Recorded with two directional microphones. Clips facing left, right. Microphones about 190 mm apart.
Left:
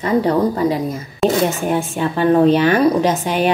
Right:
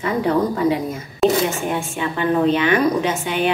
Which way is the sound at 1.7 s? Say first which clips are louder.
Left 4 dB; 40° left (ahead or behind).